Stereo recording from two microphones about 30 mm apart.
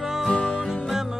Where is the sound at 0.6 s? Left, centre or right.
Centre.